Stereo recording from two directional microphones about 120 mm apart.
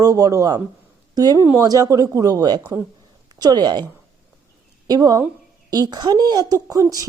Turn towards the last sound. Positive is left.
turn(degrees=-30)  # may be behind; listen again after turning